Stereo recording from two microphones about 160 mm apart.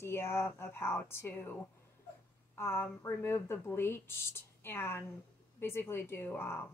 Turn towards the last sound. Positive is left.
turn(degrees=10)  # may be behind; listen again after turning